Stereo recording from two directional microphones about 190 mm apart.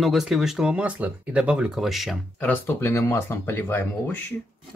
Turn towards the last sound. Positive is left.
turn(degrees=10)  # may be behind; listen again after turning